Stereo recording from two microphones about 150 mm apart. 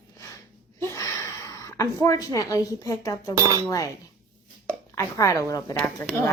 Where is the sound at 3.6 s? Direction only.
20° left (ahead or behind).